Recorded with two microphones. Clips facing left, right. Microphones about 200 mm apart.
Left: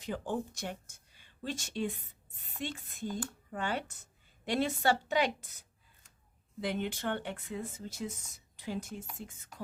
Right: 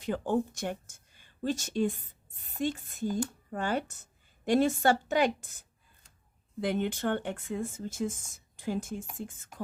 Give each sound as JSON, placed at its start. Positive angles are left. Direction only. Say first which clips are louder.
{"t": 0.0, "sound": "speech", "louder": "right 6 dB", "side_deg": -55}